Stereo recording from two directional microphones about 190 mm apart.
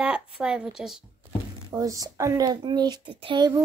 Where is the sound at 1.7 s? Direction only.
15° right (ahead or behind).